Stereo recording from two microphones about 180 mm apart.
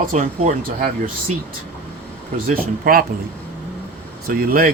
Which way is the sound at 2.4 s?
55° right (ahead or behind).